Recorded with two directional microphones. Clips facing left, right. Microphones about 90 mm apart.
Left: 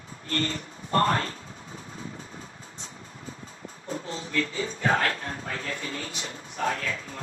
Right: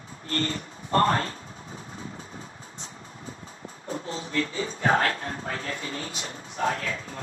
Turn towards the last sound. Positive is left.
turn(degrees=-35)  # may be behind; listen again after turning